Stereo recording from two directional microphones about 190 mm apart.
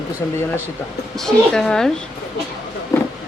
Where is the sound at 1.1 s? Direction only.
5° left (ahead or behind).